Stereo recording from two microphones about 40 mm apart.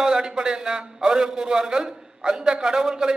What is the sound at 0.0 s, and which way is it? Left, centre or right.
A man's voice, centre.